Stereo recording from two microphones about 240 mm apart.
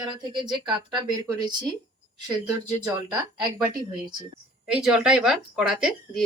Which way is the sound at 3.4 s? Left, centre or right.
Centre.